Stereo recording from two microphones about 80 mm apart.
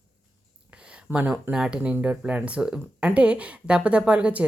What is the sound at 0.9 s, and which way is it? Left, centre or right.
Speech, centre.